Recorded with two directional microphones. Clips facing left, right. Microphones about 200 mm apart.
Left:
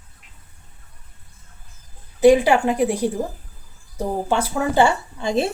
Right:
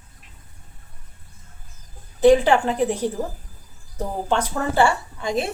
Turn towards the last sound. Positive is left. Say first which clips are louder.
# left 3 dB
turn(degrees=25)  # may be behind; listen again after turning